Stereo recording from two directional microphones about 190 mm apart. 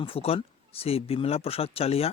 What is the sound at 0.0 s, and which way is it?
Speech, 30° left (ahead or behind).